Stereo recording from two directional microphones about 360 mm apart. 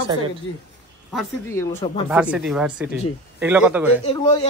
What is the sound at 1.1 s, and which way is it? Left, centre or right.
Speech, centre.